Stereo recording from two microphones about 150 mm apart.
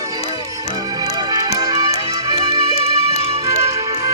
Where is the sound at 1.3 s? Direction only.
25° right (ahead or behind).